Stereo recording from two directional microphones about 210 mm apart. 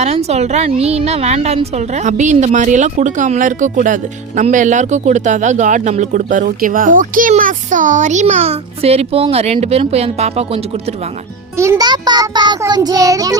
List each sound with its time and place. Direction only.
0.0 s a woman's voice: 30° right (ahead or behind)
11.5 s music: 15° right (ahead or behind)